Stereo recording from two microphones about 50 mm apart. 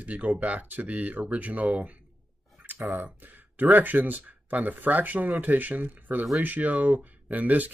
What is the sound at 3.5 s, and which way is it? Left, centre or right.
Speech, right.